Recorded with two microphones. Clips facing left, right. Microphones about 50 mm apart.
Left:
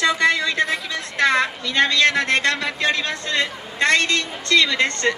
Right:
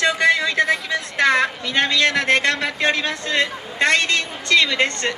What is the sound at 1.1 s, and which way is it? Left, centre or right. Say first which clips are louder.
A woman's voice: right 1 dB; centre.